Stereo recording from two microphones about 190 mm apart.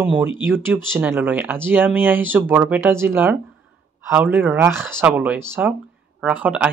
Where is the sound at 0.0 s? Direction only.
10° right (ahead or behind).